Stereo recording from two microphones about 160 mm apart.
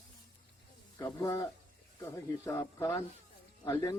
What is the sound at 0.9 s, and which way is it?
Speech, 20° left (ahead or behind).